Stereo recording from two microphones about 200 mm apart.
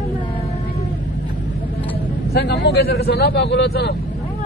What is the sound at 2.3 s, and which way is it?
Speech, 55° left (ahead or behind).